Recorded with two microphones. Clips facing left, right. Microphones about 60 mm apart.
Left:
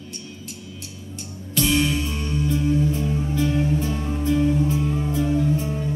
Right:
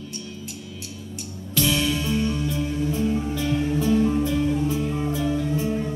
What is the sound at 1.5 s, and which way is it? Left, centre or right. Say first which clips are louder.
Music: left 2 dB; left.